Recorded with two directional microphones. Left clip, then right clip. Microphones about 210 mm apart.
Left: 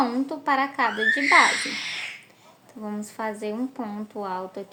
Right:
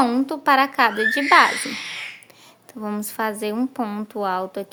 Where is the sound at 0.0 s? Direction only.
40° right (ahead or behind).